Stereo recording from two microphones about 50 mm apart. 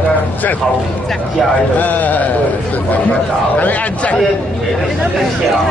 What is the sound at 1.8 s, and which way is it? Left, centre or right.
Speech, left.